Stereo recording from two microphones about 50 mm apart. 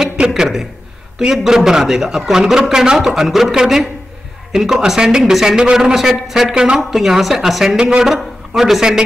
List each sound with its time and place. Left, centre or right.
0.3 s a sound: centre
1.2 s a man's voice: centre
6.5 s a man's voice: centre
6.8 s a woman's voice: centre